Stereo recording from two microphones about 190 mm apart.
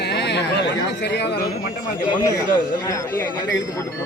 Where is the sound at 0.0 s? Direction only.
60° left (ahead or behind).